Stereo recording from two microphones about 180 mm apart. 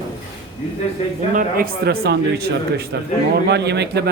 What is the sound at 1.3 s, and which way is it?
A man's voice, 50° right (ahead or behind).